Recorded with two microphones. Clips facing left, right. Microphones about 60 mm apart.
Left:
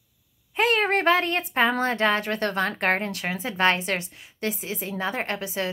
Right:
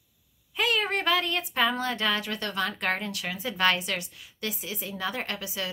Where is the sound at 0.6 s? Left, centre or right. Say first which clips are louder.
Left 5 dB; left.